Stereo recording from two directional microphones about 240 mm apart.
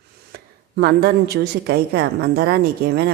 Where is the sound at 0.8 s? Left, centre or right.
Right.